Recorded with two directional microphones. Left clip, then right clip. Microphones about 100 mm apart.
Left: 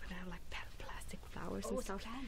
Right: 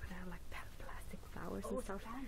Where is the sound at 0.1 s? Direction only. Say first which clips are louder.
Left 5 dB; 10° left (ahead or behind).